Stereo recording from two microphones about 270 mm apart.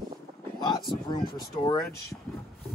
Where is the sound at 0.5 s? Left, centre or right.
Centre.